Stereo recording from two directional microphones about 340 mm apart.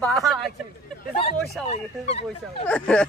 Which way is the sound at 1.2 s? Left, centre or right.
Centre.